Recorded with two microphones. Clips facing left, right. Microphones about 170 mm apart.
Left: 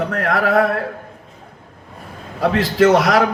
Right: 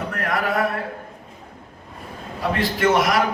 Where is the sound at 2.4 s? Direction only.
90° left.